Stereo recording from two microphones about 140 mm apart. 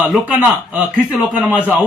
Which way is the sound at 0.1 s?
10° right (ahead or behind).